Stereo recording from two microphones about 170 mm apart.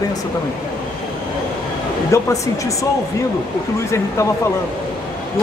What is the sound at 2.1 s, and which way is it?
Speech, 20° left (ahead or behind).